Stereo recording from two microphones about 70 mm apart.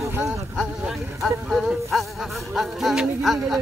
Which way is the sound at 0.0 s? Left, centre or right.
Right.